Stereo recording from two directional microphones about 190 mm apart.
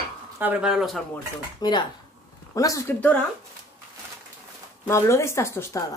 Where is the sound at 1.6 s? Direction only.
20° left (ahead or behind).